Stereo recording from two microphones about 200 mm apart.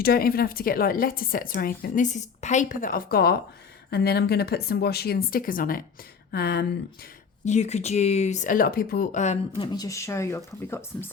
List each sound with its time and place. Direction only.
0.0 s speech: 50° left (ahead or behind)
7.4 s speech: 35° left (ahead or behind)
9.6 s speech: 20° left (ahead or behind)